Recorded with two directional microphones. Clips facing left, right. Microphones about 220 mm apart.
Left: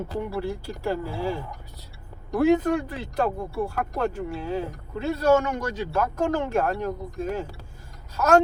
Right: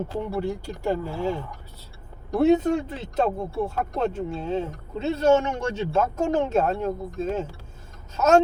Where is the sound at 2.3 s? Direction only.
25° right (ahead or behind).